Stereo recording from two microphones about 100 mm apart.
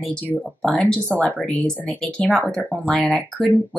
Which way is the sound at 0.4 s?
10° left (ahead or behind).